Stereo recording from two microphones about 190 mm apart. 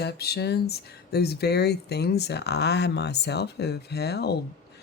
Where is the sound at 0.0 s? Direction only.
55° left (ahead or behind).